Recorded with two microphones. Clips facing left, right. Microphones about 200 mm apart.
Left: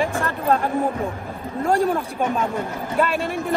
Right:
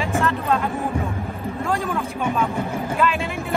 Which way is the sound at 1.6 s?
30° left (ahead or behind).